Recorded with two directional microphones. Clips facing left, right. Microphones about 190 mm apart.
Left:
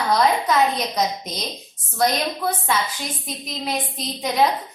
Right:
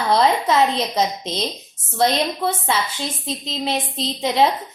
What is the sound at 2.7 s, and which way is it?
A woman's voice, 25° right (ahead or behind).